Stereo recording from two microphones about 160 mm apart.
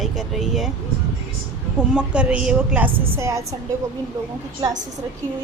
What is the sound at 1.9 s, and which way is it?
A woman's voice, 5° right (ahead or behind).